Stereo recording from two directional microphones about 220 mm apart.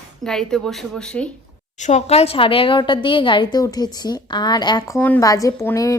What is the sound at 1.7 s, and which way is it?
A woman's voice, 30° left (ahead or behind).